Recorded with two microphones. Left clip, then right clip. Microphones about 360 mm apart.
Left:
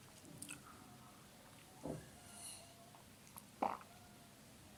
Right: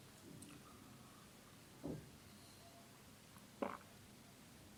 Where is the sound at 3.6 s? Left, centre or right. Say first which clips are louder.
Left 5 dB; right.